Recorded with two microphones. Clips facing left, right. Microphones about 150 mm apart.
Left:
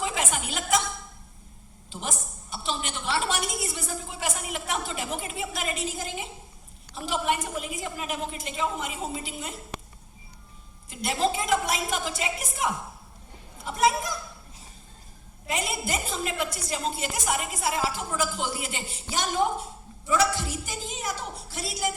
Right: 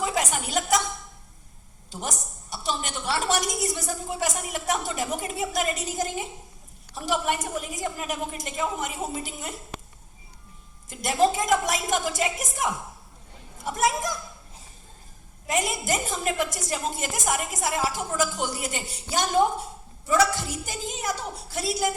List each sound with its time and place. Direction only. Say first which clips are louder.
0.0 s music: right 3 dB; 40° right (ahead or behind)
1.9 s a woman's voice: right 1 dB; 40° right (ahead or behind)
10.8 s a woman's voice: right 4 dB; 45° right (ahead or behind)
13.7 s a woman's voice: left 1 dB; 45° right (ahead or behind)
15.9 s a woman's voice: right 3 dB; 45° right (ahead or behind)